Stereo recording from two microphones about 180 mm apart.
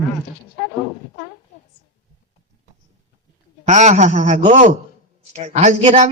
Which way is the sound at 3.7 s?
40° right (ahead or behind).